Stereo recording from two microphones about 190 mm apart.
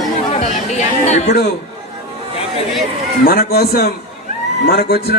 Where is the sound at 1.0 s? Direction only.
35° left (ahead or behind).